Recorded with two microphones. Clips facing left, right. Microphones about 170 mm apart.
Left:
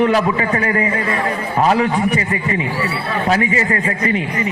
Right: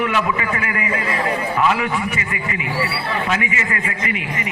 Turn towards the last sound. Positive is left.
turn(degrees=35)  # may be behind; listen again after turning